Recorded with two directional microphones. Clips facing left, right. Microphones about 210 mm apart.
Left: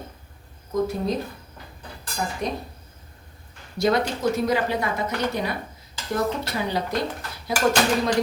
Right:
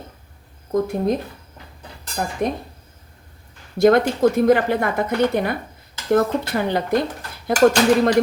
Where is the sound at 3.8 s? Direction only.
50° right (ahead or behind).